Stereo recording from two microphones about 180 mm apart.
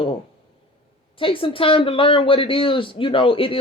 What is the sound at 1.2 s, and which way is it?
Speech, 30° left (ahead or behind).